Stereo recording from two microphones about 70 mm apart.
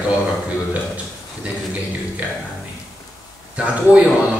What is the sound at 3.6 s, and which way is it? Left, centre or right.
Speech, centre.